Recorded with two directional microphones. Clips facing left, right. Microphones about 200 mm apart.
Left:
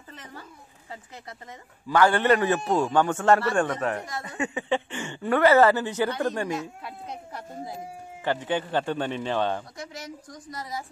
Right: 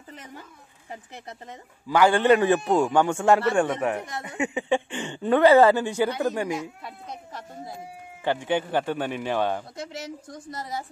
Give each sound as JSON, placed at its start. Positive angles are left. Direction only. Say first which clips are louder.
{"t": 0.1, "sound": "a sound", "louder": "right 2 dB", "side_deg": -15}
{"t": 1.9, "sound": "speech", "louder": "right 2 dB", "side_deg": -10}
{"t": 6.6, "sound": "speech", "louder": "even", "side_deg": 0}
{"t": 8.5, "sound": "speech", "louder": "right 2 dB", "side_deg": -15}
{"t": 9.8, "sound": "a woman's voice", "louder": "right 3 dB", "side_deg": -25}